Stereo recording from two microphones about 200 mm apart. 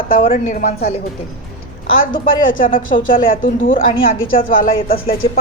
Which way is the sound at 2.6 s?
45° left (ahead or behind).